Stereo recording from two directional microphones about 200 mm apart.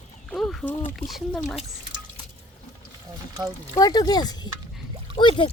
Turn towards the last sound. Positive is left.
turn(degrees=25)  # may be behind; listen again after turning